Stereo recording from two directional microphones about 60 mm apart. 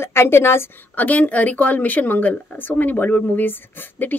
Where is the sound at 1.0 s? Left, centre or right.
Left.